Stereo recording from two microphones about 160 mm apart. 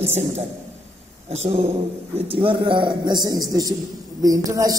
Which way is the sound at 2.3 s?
35° right (ahead or behind).